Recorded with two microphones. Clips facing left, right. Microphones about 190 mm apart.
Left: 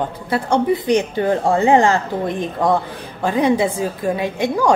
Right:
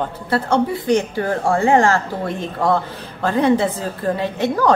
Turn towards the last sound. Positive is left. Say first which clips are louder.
# even
turn(degrees=15)  # may be behind; listen again after turning